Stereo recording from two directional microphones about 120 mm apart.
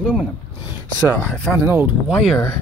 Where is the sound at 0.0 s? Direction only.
10° left (ahead or behind).